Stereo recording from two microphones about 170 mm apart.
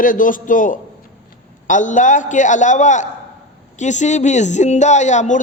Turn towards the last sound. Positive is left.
turn(degrees=45)  # may be behind; listen again after turning